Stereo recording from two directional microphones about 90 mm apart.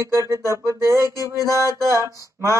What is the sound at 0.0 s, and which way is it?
Speech, 35° right (ahead or behind).